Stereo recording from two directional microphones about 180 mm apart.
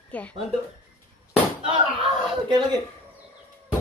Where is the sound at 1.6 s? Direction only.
25° right (ahead or behind).